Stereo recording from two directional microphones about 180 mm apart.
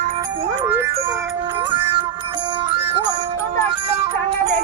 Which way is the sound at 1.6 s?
30° right (ahead or behind).